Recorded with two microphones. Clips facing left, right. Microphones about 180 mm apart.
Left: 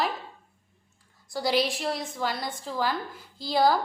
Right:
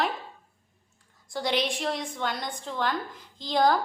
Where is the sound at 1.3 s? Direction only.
Centre (ahead or behind).